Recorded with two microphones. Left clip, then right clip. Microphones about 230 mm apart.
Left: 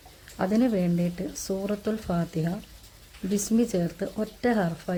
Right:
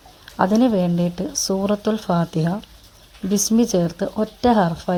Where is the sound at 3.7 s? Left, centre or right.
Centre.